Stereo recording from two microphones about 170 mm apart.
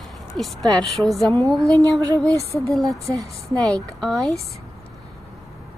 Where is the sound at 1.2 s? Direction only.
20° right (ahead or behind).